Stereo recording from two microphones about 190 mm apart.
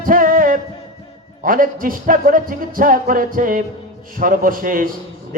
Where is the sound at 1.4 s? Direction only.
45° right (ahead or behind).